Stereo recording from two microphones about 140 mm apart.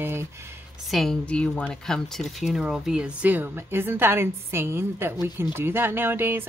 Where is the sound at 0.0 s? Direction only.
15° right (ahead or behind).